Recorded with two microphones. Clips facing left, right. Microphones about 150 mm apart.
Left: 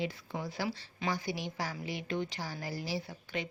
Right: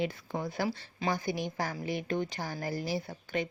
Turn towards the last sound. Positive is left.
turn(degrees=-50)  # may be behind; listen again after turning